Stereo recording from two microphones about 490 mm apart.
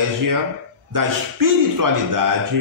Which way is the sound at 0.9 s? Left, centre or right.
Right.